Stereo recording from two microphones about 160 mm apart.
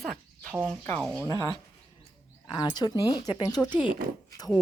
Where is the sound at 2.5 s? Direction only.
30° left (ahead or behind).